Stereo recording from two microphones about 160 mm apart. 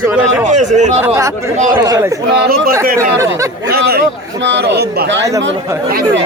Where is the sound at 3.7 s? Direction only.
75° right (ahead or behind).